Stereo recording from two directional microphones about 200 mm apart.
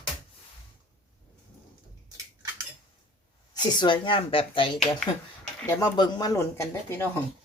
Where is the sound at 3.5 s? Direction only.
20° left (ahead or behind).